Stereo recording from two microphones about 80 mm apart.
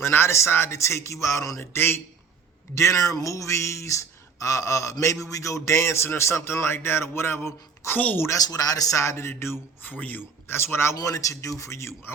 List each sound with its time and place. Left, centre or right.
0.0 s speech: left
2.7 s a man's voice: left
8.3 s a man's voice: left
10.9 s speech: left